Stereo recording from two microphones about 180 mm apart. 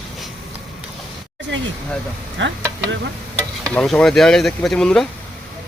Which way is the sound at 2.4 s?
90° right.